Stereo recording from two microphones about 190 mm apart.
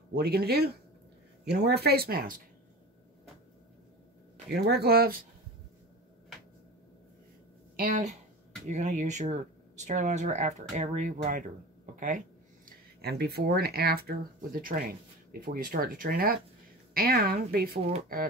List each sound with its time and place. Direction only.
0.1 s speech: 55° right (ahead or behind)
4.5 s speech: 55° right (ahead or behind)
7.7 s speech: 45° right (ahead or behind)
12.6 s speech: 55° right (ahead or behind)